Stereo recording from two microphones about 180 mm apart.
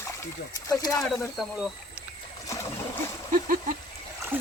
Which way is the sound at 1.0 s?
Centre (ahead or behind).